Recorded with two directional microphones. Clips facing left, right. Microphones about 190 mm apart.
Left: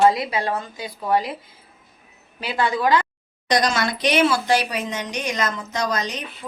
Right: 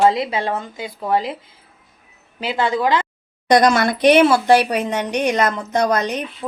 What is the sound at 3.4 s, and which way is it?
A woman's voice, 55° right (ahead or behind).